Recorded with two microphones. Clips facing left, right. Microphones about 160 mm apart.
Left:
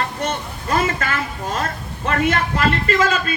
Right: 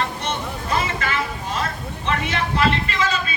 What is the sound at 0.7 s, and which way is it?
A man's voice, 45° left (ahead or behind).